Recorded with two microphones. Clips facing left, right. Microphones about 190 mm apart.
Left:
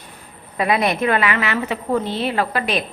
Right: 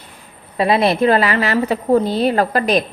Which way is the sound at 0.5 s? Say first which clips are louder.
Right 4 dB; 30° right (ahead or behind).